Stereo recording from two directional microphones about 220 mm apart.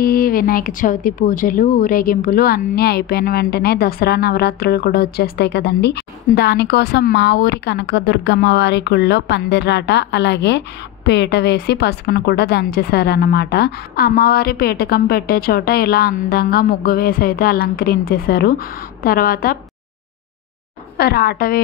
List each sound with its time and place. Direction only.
0.0 s speech: 40° left (ahead or behind)
21.0 s speech: 45° left (ahead or behind)